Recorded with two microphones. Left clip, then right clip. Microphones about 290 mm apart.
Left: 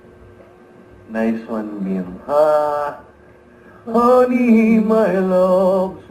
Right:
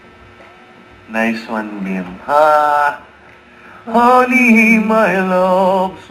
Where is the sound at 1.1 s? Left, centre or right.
Centre.